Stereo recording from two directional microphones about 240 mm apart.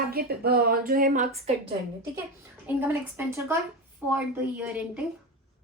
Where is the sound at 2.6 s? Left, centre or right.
Centre.